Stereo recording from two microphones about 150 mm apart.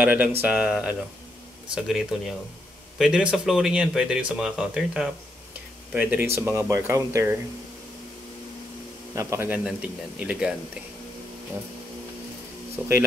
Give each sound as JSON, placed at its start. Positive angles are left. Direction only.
{"t": 0.0, "sound": "speech", "side_deg": -10}
{"t": 9.1, "sound": "a man's voice", "side_deg": -20}
{"t": 9.7, "sound": "speech", "side_deg": -5}